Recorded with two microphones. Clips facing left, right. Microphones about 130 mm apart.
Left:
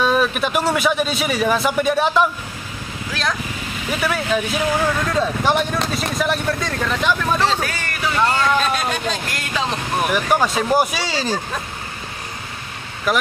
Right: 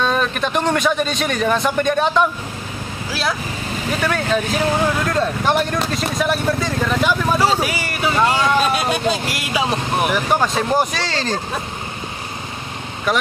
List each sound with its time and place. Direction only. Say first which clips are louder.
0.0 s speech: left 1 dB; 5° left (ahead or behind)
13.1 s speech: even; centre (ahead or behind)